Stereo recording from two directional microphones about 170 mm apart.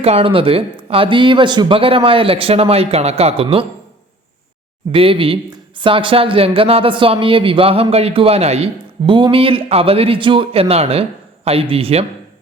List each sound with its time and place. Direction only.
0.0 s speech: 35° right (ahead or behind)
4.9 s speech: 30° right (ahead or behind)